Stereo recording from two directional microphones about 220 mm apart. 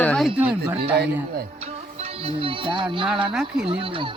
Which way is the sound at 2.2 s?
25° right (ahead or behind).